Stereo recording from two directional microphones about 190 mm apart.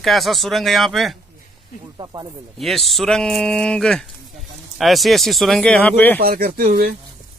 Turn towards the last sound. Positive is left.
turn(degrees=-55)  # may be behind; listen again after turning